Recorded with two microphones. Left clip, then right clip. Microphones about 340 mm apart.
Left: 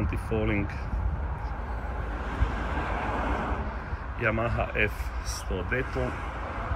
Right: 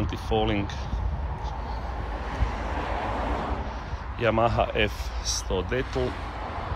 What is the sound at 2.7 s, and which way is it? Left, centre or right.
Vehicle, right.